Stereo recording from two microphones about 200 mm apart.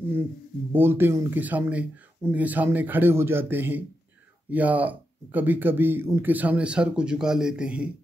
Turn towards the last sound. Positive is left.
turn(degrees=-5)  # may be behind; listen again after turning